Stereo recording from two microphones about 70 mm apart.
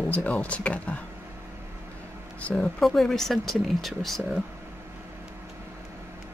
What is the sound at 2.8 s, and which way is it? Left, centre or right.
Speech, centre.